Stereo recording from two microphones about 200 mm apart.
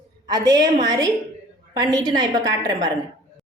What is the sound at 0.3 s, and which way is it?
A woman's voice, 20° right (ahead or behind).